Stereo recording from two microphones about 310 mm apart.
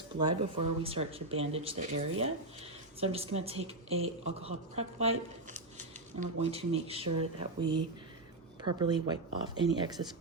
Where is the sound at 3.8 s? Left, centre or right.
Right.